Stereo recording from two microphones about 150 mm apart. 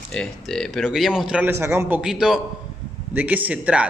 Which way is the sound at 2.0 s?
5° right (ahead or behind).